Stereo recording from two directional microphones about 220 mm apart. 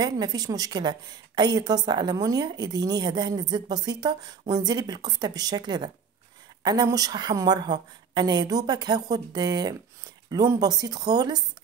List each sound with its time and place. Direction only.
0.0 s a woman's voice: 20° right (ahead or behind)